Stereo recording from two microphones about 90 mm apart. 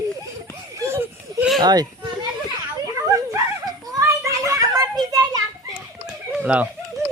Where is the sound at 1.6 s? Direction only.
50° right (ahead or behind).